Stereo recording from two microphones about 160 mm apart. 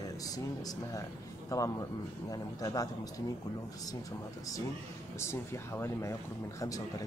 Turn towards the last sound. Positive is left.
turn(degrees=20)  # may be behind; listen again after turning